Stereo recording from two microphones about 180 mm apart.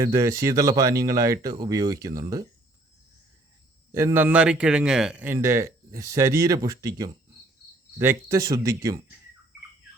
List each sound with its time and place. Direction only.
0.0 s a man's voice: 15° right (ahead or behind)
3.9 s a man's voice: 15° right (ahead or behind)